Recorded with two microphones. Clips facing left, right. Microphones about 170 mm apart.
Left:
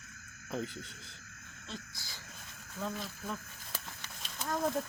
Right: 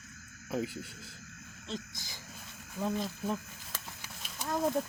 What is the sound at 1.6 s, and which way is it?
Speech, 20° right (ahead or behind).